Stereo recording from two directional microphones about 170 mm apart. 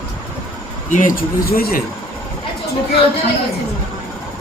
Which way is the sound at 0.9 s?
50° left (ahead or behind).